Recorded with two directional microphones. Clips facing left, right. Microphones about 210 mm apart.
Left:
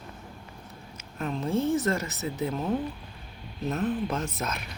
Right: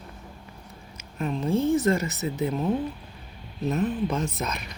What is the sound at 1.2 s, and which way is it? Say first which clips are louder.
Speech: right 3 dB; centre (ahead or behind).